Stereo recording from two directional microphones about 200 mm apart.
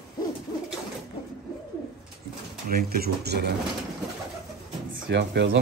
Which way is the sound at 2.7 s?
50° right (ahead or behind).